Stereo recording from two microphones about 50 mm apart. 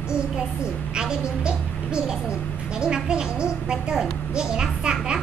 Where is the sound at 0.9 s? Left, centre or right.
Centre.